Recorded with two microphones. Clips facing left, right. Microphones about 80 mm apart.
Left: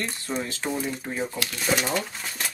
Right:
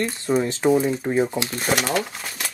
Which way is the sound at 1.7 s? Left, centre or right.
Right.